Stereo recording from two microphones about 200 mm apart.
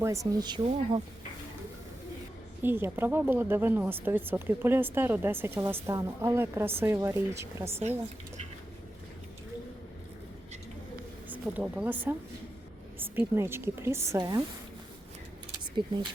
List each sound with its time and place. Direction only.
0.0 s speech: 15° right (ahead or behind)
2.6 s a woman's voice: 10° right (ahead or behind)
11.3 s a woman's voice: 5° right (ahead or behind)
15.7 s speech: 20° right (ahead or behind)